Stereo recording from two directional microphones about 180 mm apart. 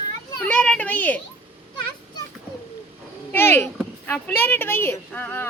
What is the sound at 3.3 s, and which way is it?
A woman's voice, 10° left (ahead or behind).